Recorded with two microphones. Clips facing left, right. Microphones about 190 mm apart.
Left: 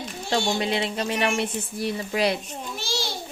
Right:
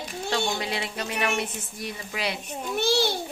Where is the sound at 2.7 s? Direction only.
60° right (ahead or behind).